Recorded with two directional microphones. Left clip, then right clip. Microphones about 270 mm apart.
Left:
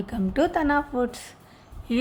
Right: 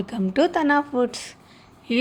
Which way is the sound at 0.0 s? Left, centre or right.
Centre.